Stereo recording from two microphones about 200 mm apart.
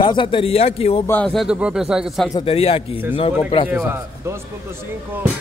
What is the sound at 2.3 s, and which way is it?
Speech, 30° left (ahead or behind).